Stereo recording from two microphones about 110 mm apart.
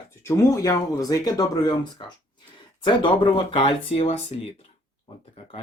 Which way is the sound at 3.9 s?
65° left (ahead or behind).